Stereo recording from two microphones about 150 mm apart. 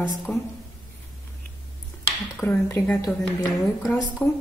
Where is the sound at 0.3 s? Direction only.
15° left (ahead or behind).